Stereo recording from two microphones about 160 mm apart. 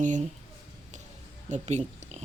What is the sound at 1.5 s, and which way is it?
Speech, 45° right (ahead or behind).